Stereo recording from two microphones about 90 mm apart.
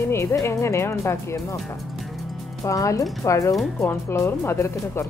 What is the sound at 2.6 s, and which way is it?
Speech, 40° left (ahead or behind).